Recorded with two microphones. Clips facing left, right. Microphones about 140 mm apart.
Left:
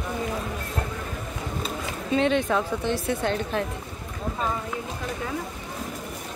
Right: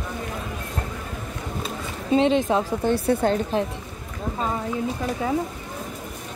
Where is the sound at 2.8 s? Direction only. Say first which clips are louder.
Right 5 dB; 40° right (ahead or behind).